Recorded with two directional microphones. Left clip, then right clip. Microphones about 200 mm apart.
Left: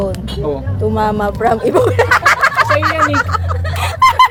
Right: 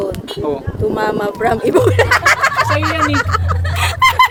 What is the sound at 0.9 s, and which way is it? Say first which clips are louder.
Speech: left 3 dB; centre (ahead or behind).